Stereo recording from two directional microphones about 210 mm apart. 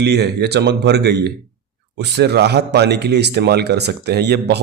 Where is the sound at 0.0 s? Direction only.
50° right (ahead or behind).